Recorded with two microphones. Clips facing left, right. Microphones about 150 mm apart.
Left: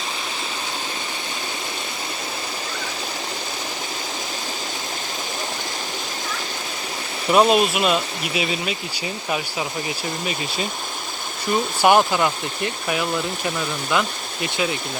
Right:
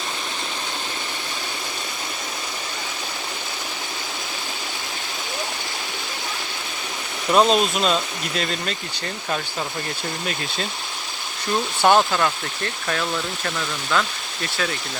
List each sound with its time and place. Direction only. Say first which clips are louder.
7.3 s speech: left 1 dB; 5° left (ahead or behind)
10.2 s speech: left 2 dB; 5° left (ahead or behind)